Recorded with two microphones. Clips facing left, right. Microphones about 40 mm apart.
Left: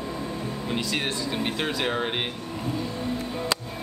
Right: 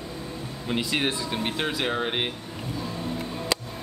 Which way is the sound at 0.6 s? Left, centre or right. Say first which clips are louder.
Right 3 dB; centre.